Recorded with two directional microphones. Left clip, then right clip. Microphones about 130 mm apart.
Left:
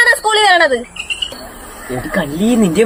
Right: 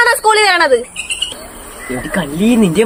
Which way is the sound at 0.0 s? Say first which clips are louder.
Right 1 dB; 15° right (ahead or behind).